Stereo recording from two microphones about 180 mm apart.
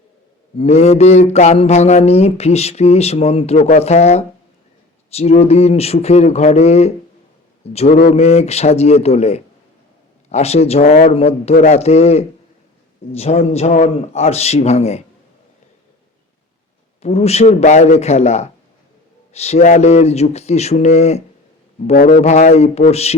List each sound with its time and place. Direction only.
0.6 s speech: 35° left (ahead or behind)
17.0 s speech: 35° left (ahead or behind)
21.9 s speech: 45° left (ahead or behind)